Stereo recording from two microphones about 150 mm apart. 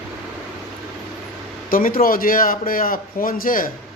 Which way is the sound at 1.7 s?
70° left (ahead or behind).